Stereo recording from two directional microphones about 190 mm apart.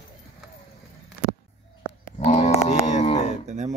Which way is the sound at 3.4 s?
40° right (ahead or behind).